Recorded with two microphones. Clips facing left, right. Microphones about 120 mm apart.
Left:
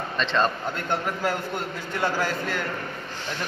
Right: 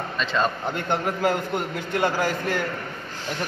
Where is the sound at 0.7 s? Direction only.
20° right (ahead or behind).